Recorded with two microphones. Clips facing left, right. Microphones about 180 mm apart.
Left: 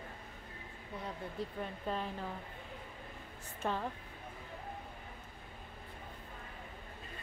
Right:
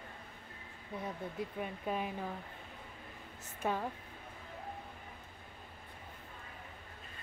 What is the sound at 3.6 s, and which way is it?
Speech, 10° right (ahead or behind).